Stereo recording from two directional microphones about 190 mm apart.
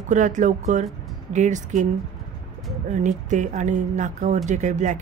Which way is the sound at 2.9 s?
40° right (ahead or behind).